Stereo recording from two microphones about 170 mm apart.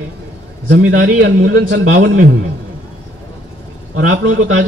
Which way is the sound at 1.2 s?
85° right.